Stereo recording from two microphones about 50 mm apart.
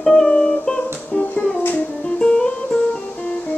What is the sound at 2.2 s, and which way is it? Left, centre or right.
Music, left.